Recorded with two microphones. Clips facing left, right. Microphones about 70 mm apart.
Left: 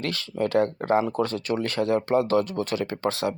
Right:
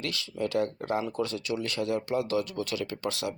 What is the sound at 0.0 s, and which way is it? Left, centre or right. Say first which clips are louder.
Speech: left 5 dB; left.